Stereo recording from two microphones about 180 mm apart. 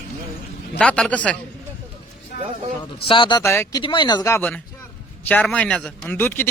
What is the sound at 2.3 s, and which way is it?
Speech, 60° left (ahead or behind).